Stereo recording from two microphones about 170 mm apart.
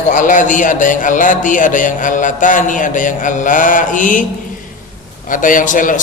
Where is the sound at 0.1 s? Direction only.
50° left (ahead or behind).